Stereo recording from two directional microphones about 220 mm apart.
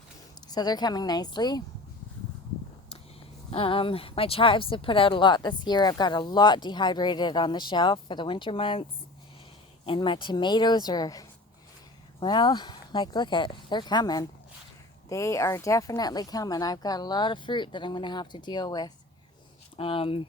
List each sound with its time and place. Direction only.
0.4 s speech: 20° left (ahead or behind)
3.5 s speech: 25° left (ahead or behind)